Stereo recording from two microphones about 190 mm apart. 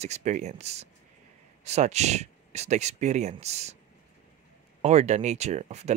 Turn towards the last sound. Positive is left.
turn(degrees=-35)  # may be behind; listen again after turning